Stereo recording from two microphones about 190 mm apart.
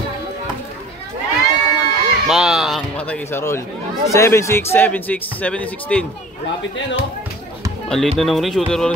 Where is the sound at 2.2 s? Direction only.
Centre (ahead or behind).